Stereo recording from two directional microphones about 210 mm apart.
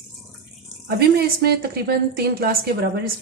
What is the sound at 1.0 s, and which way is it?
A woman's voice, 50° right (ahead or behind).